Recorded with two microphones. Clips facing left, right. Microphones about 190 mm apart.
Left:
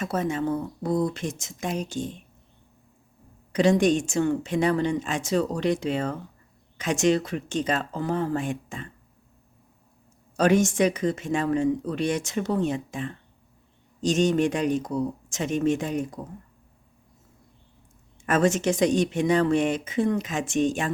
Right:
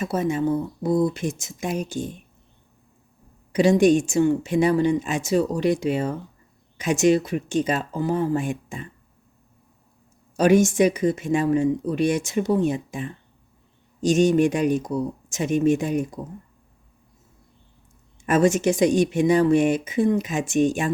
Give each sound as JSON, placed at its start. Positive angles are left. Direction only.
{"t": 0.0, "sound": "speech", "side_deg": -10}
{"t": 3.5, "sound": "speech", "side_deg": -10}
{"t": 10.3, "sound": "speech", "side_deg": -10}
{"t": 18.3, "sound": "speech", "side_deg": -10}